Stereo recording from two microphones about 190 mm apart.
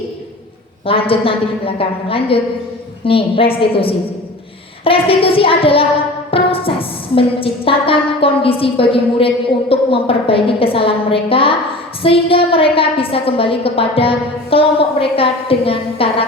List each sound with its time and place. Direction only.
0.9 s a woman's voice: 30° left (ahead or behind)